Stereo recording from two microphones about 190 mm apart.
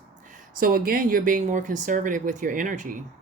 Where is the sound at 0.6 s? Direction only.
50° right (ahead or behind).